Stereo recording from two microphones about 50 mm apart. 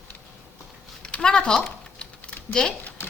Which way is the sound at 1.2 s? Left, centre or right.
Centre.